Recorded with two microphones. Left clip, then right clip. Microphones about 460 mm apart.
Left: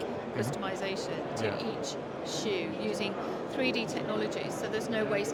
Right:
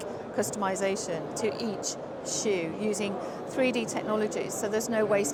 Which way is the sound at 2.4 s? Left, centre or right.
Right.